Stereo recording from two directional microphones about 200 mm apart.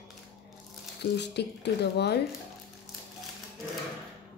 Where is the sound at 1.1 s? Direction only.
60° left (ahead or behind).